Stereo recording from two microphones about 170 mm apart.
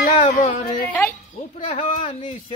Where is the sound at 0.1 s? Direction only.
30° left (ahead or behind).